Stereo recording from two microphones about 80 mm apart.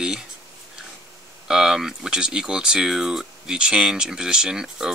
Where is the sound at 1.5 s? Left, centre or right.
Centre.